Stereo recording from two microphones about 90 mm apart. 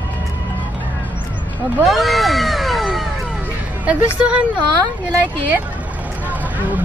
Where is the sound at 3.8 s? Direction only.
15° right (ahead or behind).